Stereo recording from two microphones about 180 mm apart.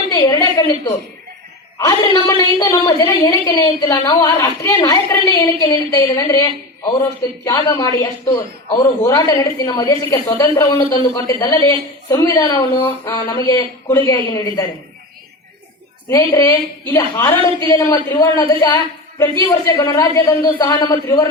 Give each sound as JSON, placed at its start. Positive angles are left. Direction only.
{"t": 0.1, "sound": "a sound", "side_deg": 20}
{"t": 1.8, "sound": "a woman's voice", "side_deg": 20}
{"t": 16.0, "sound": "a woman's voice", "side_deg": 15}